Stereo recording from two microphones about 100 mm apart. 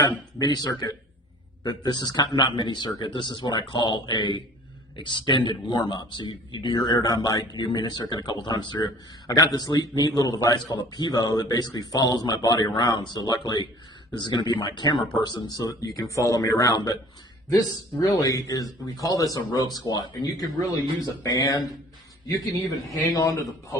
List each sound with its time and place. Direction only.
0.3 s a man's voice: 40° left (ahead or behind)
21.2 s a man's voice: 35° left (ahead or behind)